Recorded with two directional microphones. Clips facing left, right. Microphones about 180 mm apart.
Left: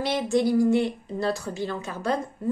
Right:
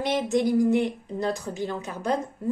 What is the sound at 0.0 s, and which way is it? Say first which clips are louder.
A woman's voice: even; 20° right (ahead or behind).